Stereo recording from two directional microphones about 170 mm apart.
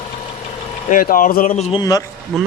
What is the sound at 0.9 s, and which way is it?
Speech, 55° left (ahead or behind).